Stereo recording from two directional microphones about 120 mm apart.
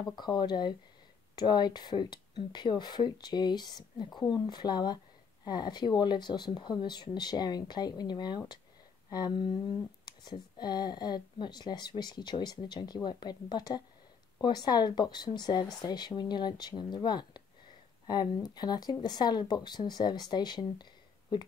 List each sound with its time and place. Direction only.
0.0 s speech: 35° left (ahead or behind)